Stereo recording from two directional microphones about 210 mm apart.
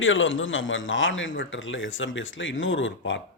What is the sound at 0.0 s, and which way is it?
A man's voice, 65° left (ahead or behind).